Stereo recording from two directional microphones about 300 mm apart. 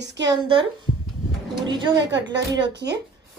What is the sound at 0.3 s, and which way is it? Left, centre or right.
Speech, centre.